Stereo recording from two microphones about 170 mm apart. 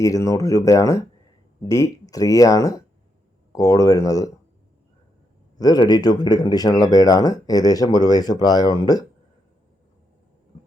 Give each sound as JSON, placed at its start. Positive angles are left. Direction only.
{"t": 0.0, "sound": "speech", "side_deg": 20}
{"t": 5.5, "sound": "speech", "side_deg": 25}